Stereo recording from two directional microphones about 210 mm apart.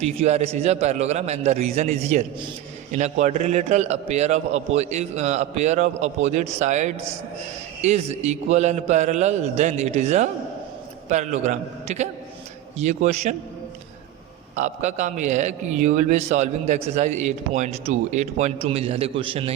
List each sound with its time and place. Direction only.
0.0 s a man's voice: 30° right (ahead or behind)
14.5 s a man's voice: 35° right (ahead or behind)